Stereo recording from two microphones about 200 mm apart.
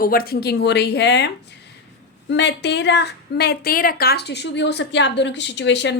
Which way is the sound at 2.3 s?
60° left (ahead or behind).